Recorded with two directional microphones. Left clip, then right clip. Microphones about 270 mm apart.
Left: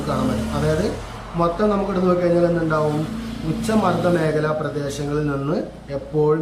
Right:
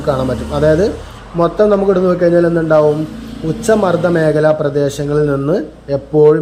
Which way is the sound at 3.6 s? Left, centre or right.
Centre.